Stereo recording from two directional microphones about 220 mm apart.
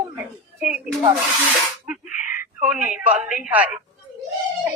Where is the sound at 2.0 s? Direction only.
35° left (ahead or behind).